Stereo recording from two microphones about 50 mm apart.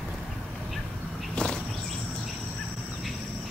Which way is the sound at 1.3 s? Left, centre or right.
Centre.